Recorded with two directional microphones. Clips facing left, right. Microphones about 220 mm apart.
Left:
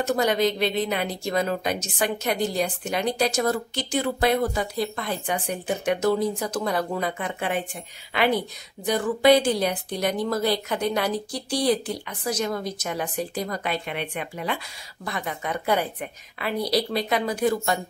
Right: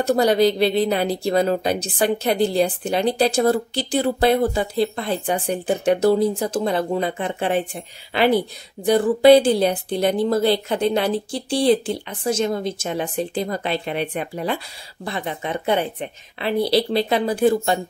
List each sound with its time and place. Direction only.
0.0 s a woman's voice: 35° right (ahead or behind)